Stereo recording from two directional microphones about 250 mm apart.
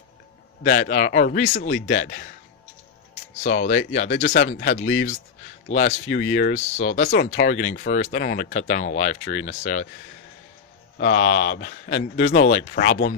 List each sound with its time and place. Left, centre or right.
0.7 s a man's voice: left
3.6 s a man's voice: left
4.1 s speech: left
5.7 s speech: left
11.0 s a man's voice: left